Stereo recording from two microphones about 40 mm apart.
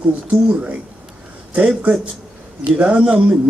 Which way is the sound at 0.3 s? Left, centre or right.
Right.